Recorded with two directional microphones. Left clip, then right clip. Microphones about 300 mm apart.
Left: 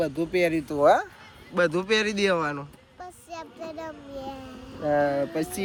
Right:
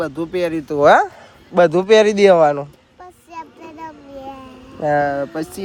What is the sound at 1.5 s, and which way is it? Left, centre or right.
Speech, centre.